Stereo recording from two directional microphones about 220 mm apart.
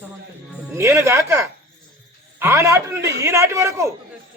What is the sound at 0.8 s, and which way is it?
A man's voice, 15° right (ahead or behind).